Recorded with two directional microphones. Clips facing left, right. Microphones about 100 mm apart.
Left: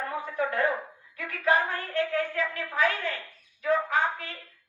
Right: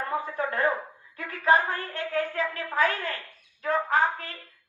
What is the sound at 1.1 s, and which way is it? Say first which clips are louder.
A woman's voice: right 3 dB; 35° right (ahead or behind).